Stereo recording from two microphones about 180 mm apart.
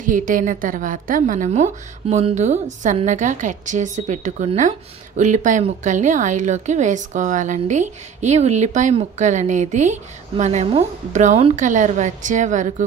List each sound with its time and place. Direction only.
0.0 s a woman's voice: 50° right (ahead or behind)